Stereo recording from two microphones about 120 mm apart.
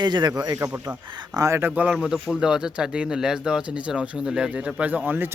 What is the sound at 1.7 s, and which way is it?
Speech, 10° right (ahead or behind).